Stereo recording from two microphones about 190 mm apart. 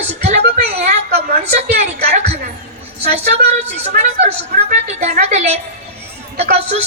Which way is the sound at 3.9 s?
50° right (ahead or behind).